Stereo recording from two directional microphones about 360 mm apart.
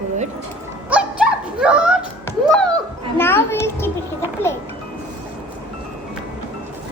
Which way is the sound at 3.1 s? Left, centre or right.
Centre.